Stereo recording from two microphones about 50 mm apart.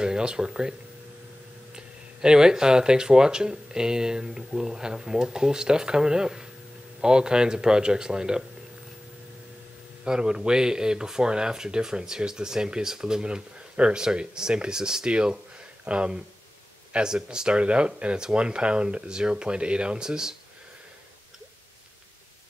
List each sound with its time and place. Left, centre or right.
0.0 s speech: centre
2.2 s speech: centre
10.0 s speech: centre